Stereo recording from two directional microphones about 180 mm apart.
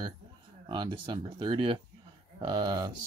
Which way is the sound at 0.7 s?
25° right (ahead or behind).